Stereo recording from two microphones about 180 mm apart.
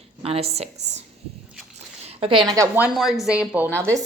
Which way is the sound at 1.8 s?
35° right (ahead or behind).